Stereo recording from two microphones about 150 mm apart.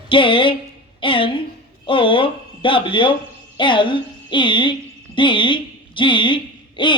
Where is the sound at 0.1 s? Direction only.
35° left (ahead or behind).